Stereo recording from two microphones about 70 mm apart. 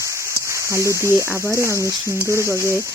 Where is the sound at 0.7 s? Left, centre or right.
Right.